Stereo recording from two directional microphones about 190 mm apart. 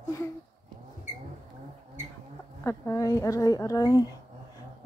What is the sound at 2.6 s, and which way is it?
A woman's voice, 15° left (ahead or behind).